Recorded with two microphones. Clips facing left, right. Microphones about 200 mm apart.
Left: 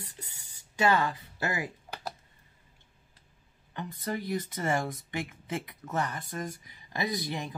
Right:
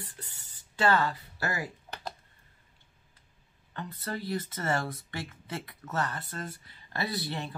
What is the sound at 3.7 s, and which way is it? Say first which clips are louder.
Speech: left 2 dB; 15° left (ahead or behind).